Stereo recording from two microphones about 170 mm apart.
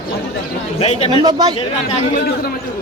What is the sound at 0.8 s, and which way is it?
Speech, 40° left (ahead or behind).